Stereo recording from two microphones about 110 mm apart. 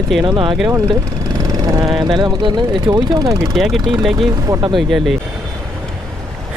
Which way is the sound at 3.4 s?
Centre (ahead or behind).